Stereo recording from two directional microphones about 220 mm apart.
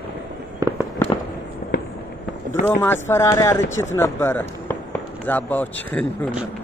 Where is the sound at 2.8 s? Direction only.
10° left (ahead or behind).